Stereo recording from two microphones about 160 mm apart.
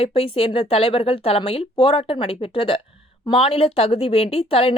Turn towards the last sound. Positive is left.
turn(degrees=35)  # may be behind; listen again after turning